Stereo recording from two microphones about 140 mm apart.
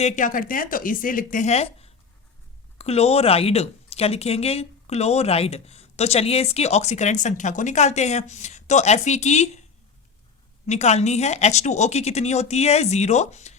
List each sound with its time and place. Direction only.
0.0 s speech: 70° left (ahead or behind); by 9.6 s 55° left (ahead or behind)
10.7 s speech: 50° left (ahead or behind)